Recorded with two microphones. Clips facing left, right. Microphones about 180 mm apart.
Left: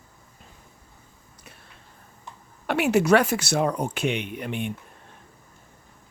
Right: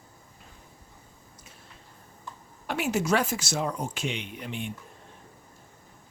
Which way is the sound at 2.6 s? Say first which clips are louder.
Left 7 dB; 65° left (ahead or behind).